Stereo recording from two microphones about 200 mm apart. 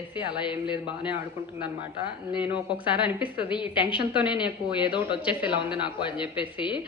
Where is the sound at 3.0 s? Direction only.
25° left (ahead or behind).